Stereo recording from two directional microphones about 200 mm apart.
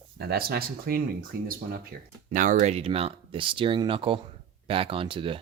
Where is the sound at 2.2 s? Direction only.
40° right (ahead or behind).